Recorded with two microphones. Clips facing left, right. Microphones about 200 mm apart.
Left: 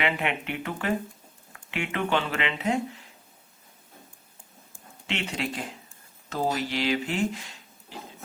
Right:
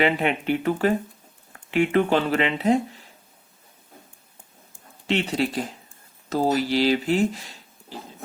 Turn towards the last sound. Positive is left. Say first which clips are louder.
# right 4 dB
turn(degrees=-35)  # may be behind; listen again after turning